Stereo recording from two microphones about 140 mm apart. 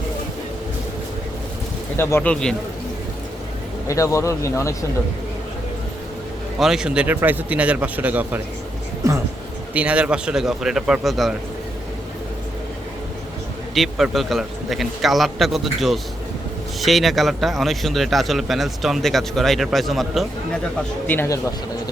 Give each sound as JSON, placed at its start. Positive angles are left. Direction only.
{"t": 2.0, "sound": "speech", "side_deg": 15}
{"t": 2.3, "sound": "a man's voice", "side_deg": 5}
{"t": 3.8, "sound": "speech", "side_deg": 20}
{"t": 6.6, "sound": "speech", "side_deg": -5}
{"t": 9.7, "sound": "a man's voice", "side_deg": -10}
{"t": 13.7, "sound": "a man's voice", "side_deg": 0}
{"t": 21.1, "sound": "speech", "side_deg": 20}